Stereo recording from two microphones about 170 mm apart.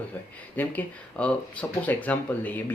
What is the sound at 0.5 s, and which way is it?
Speech, 10° left (ahead or behind).